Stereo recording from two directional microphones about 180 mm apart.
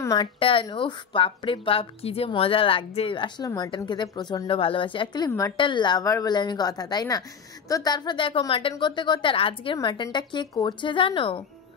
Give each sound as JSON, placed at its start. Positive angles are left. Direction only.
{"t": 0.0, "sound": "a woman's voice", "side_deg": 25}